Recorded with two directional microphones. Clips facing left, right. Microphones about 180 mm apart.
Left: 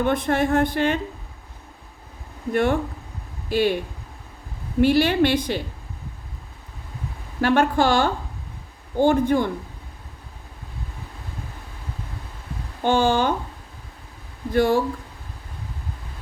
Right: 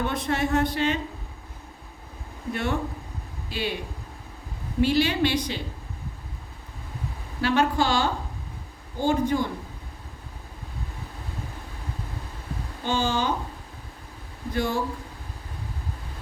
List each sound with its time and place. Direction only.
0.0 s speech: 55° left (ahead or behind)
2.5 s speech: 55° left (ahead or behind)
4.8 s speech: 55° left (ahead or behind)
7.4 s speech: 55° left (ahead or behind)
12.8 s speech: 55° left (ahead or behind)
14.5 s speech: 55° left (ahead or behind)